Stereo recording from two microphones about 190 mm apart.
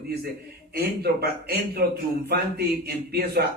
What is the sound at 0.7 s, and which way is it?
A man's voice, 55° right (ahead or behind).